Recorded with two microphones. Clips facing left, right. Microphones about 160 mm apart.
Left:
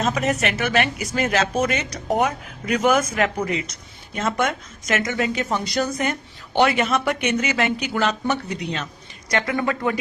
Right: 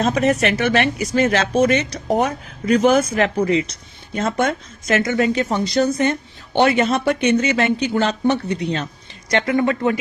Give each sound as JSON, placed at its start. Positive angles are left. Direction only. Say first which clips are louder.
{"t": 0.0, "sound": "speech", "louder": "right 5 dB", "side_deg": -35}